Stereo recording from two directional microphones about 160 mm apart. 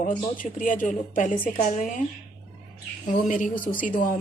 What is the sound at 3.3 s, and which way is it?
Speech, 55° left (ahead or behind).